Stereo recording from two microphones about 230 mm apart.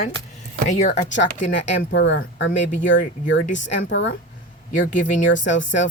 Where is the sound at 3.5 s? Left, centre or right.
Left.